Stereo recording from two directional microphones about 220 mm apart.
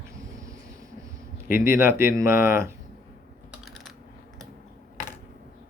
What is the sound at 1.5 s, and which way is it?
Speech, 40° left (ahead or behind).